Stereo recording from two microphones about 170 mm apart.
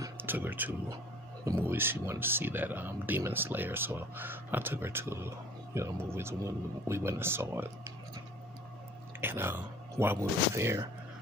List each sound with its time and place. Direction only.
0.0 s a sound: 10° right (ahead or behind)
1.7 s speech: 15° right (ahead or behind)
9.2 s speech: 15° right (ahead or behind)